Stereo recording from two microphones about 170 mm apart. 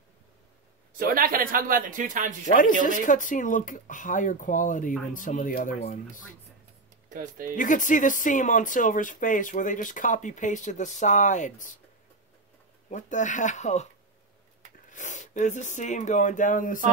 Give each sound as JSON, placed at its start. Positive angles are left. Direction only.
{"t": 0.9, "sound": "speech", "side_deg": -55}
{"t": 2.4, "sound": "speech", "side_deg": 50}
{"t": 7.1, "sound": "speech", "side_deg": -50}
{"t": 7.5, "sound": "speech", "side_deg": 50}
{"t": 12.9, "sound": "speech", "side_deg": 45}
{"t": 14.9, "sound": "speech", "side_deg": 45}